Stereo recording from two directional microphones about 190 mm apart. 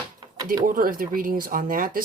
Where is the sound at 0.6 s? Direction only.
45° right (ahead or behind).